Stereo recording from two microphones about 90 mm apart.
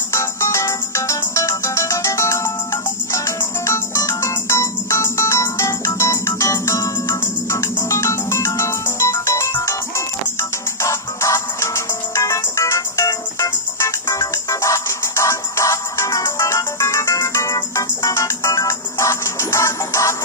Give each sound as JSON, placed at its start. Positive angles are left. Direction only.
{"t": 0.1, "sound": "music", "side_deg": 35}